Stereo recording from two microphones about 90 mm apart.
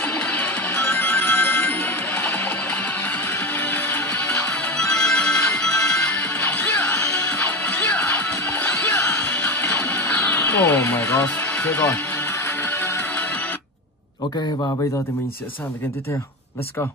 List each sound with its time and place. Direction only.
0.0 s music: 15° left (ahead or behind)
12.6 s music: 30° left (ahead or behind)